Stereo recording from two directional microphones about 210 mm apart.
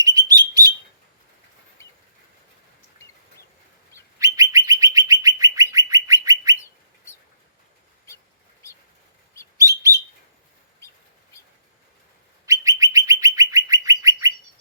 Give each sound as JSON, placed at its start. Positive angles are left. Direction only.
{"t": 0.0, "sound": "bird", "side_deg": -20}
{"t": 1.8, "sound": "a sound", "side_deg": 15}
{"t": 4.2, "sound": "bird", "side_deg": -15}
{"t": 9.6, "sound": "bird", "side_deg": -15}
{"t": 12.5, "sound": "bird", "side_deg": -15}